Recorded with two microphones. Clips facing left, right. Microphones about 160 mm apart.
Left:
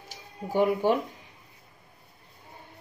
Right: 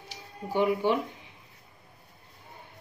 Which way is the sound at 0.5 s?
45° left (ahead or behind).